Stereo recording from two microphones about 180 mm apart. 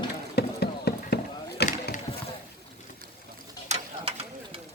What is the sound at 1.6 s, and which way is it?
Chop, 65° left (ahead or behind).